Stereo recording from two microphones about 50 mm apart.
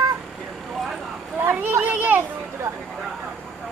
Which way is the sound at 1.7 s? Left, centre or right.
Right.